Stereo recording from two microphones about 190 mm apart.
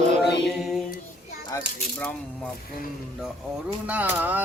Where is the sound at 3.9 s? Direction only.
10° right (ahead or behind).